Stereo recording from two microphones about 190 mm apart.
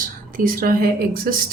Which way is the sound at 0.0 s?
45° right (ahead or behind).